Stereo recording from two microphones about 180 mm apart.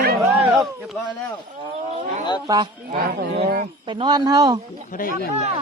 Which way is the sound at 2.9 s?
50° right (ahead or behind).